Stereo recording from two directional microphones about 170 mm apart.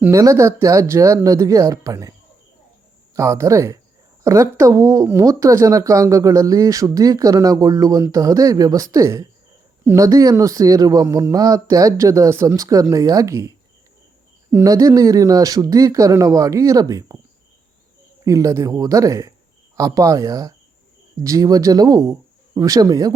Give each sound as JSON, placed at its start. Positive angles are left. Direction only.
{"t": 0.0, "sound": "speech", "side_deg": -20}
{"t": 3.2, "sound": "speech", "side_deg": -20}
{"t": 14.5, "sound": "speech", "side_deg": -20}
{"t": 18.3, "sound": "speech", "side_deg": -20}